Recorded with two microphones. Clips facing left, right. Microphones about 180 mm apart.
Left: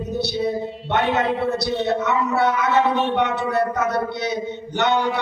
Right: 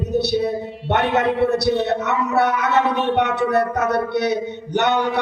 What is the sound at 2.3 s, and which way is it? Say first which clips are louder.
Speech: right 2 dB; 65° right (ahead or behind).